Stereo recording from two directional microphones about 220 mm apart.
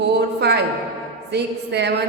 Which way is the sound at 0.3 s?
50° right (ahead or behind).